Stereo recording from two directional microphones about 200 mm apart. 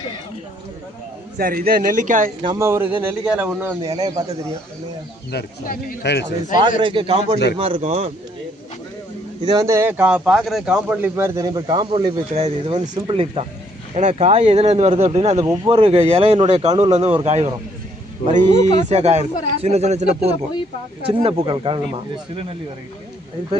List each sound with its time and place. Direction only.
1.4 s speech: 50° right (ahead or behind)
2.4 s speech: 20° right (ahead or behind)
5.3 s speech: 50° left (ahead or behind)
6.8 s speech: 25° right (ahead or behind)
9.5 s speech: 15° right (ahead or behind)